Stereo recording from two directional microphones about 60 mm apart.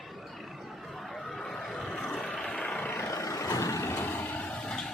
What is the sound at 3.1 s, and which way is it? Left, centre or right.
Vehicle, left.